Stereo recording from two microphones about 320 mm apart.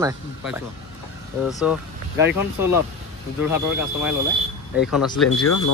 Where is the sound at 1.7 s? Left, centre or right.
Centre.